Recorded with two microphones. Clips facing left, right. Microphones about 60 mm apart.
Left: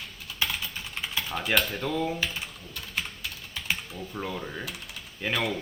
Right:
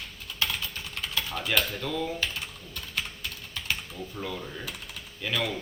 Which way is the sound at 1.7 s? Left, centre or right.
Centre.